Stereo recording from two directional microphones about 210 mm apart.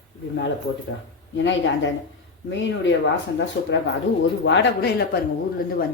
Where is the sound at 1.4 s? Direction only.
60° left (ahead or behind).